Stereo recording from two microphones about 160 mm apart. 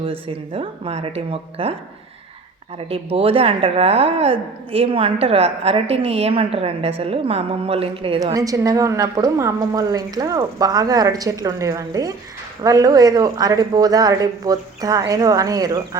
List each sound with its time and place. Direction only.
0.0 s speech: 35° right (ahead or behind)
2.7 s speech: 35° right (ahead or behind)
8.2 s a woman's voice: 20° right (ahead or behind)